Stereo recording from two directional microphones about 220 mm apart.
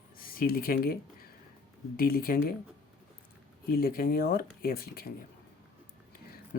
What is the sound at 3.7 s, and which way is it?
Speech, 45° left (ahead or behind).